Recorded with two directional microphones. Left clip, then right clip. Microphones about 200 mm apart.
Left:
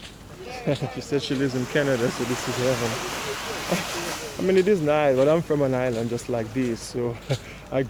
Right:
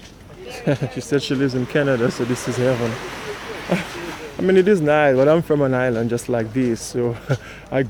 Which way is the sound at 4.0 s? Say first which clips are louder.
Even; 50° left (ahead or behind).